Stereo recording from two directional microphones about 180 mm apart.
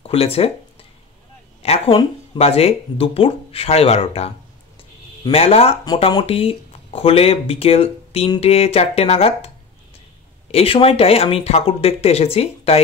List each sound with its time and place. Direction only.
0.0 s speech: 35° left (ahead or behind)
1.6 s speech: 30° left (ahead or behind)
10.5 s speech: 30° left (ahead or behind)